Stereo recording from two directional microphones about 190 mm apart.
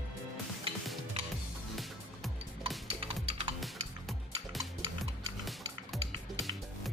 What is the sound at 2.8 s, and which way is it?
Typing, 30° right (ahead or behind).